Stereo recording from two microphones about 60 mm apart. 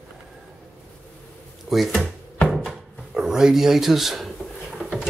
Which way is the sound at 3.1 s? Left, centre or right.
Centre.